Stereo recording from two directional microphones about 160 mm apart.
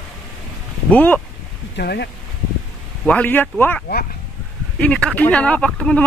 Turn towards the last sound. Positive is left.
turn(degrees=5)  # may be behind; listen again after turning